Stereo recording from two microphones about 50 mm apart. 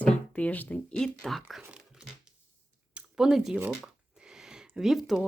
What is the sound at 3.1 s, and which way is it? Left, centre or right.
Speech, centre.